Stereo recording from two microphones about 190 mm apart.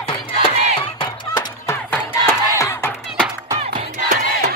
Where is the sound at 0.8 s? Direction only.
25° left (ahead or behind).